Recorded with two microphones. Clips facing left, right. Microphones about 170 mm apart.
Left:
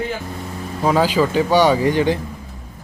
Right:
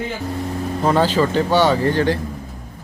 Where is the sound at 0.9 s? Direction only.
10° left (ahead or behind).